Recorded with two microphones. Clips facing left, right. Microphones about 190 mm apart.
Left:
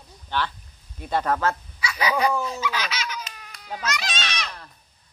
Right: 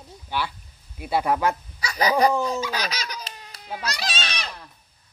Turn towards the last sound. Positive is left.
turn(degrees=-30)  # may be behind; listen again after turning